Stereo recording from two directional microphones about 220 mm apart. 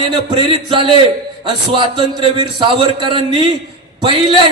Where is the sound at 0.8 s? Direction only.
25° right (ahead or behind).